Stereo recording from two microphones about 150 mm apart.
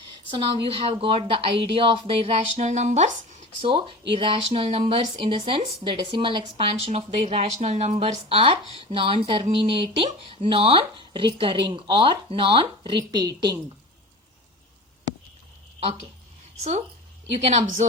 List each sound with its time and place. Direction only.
0.3 s speech: 35° right (ahead or behind)
3.6 s speech: 35° right (ahead or behind)
17.4 s a woman's voice: 50° right (ahead or behind)